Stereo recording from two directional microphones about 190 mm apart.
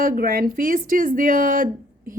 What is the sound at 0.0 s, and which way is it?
Speech, 50° right (ahead or behind).